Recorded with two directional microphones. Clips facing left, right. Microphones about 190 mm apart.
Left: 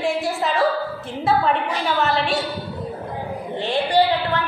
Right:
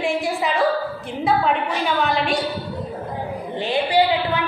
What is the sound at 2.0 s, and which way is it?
Speech, centre (ahead or behind).